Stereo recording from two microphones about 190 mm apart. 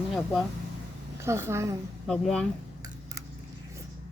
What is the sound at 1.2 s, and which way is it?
Speech, 15° right (ahead or behind).